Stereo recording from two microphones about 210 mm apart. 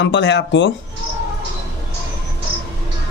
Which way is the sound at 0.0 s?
60° left (ahead or behind).